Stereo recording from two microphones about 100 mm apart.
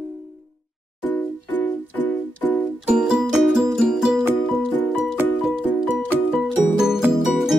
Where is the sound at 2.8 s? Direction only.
5° right (ahead or behind).